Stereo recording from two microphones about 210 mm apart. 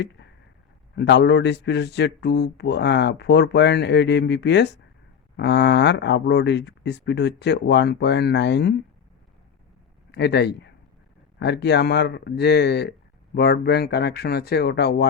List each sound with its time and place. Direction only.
0.9 s a man's voice: 55° left (ahead or behind)
10.1 s a man's voice: 55° left (ahead or behind)